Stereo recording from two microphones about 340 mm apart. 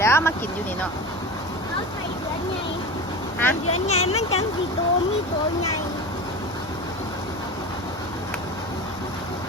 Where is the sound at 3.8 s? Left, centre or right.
Centre.